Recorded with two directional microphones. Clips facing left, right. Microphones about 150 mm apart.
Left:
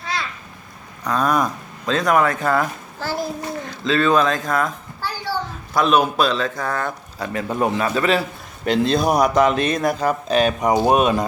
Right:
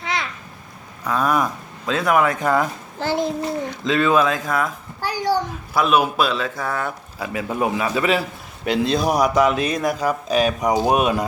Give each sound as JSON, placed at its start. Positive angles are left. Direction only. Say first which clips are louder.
{"t": 0.0, "sound": "a sound", "louder": "right 1 dB", "side_deg": -20}
{"t": 1.0, "sound": "a man's voice", "louder": "left 1 dB", "side_deg": -5}
{"t": 4.9, "sound": "a child's voice", "louder": "right 6 dB", "side_deg": -15}